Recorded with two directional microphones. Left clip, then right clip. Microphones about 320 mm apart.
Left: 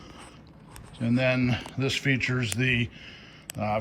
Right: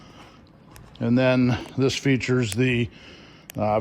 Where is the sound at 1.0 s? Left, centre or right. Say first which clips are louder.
Right 5 dB; centre.